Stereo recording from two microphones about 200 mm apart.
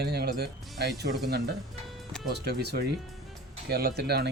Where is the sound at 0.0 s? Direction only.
55° right (ahead or behind).